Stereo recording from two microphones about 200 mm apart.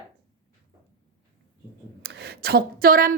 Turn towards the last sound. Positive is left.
turn(degrees=-45)  # may be behind; listen again after turning